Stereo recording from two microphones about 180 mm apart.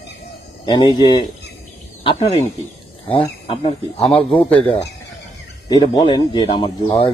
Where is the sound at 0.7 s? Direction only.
25° left (ahead or behind).